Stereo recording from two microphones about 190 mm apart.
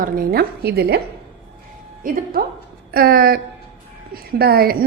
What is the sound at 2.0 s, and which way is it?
A woman's voice, 45° right (ahead or behind).